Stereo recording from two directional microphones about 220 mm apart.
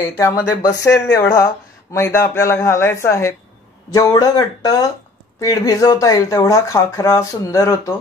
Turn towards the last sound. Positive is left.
turn(degrees=10)  # may be behind; listen again after turning